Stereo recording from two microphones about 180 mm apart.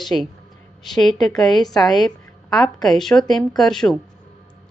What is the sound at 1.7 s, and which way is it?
Speech, 20° left (ahead or behind).